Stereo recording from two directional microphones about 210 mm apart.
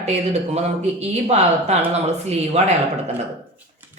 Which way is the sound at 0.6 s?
30° right (ahead or behind).